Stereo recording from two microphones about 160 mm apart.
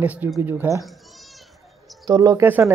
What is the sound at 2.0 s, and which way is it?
Speech, 20° right (ahead or behind).